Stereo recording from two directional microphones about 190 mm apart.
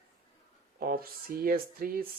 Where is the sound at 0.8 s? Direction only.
50° right (ahead or behind).